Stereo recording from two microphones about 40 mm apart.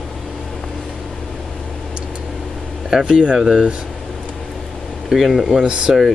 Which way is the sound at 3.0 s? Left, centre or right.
Right.